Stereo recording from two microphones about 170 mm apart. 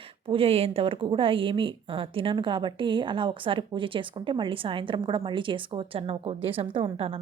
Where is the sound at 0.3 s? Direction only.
35° right (ahead or behind).